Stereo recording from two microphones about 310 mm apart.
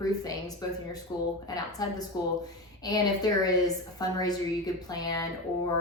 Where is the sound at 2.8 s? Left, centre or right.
Centre.